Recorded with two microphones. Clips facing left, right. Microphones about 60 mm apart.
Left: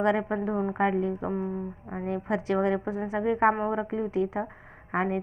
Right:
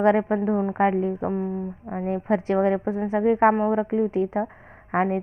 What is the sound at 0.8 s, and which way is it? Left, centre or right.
Speech, right.